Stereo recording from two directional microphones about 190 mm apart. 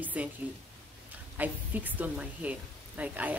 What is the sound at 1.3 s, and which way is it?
Speech, 10° right (ahead or behind).